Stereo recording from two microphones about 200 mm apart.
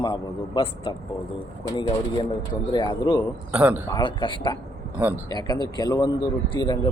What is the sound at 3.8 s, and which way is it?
A man's voice, 20° left (ahead or behind).